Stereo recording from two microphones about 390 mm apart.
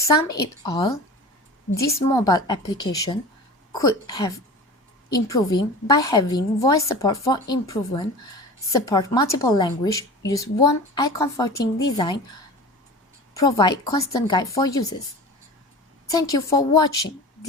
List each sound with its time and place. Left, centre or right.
0.0 s a woman's voice: centre
1.7 s a woman's voice: left
2.0 s a woman's voice: centre
13.3 s a woman's voice: centre
16.1 s a woman's voice: centre